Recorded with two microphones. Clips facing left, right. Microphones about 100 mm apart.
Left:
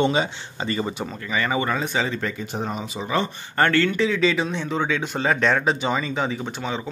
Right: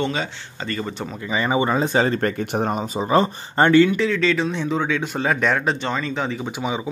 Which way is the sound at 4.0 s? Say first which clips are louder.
Right 1 dB; 5° left (ahead or behind).